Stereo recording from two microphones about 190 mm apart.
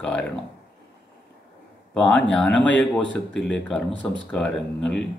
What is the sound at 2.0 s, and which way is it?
Speech, 5° left (ahead or behind).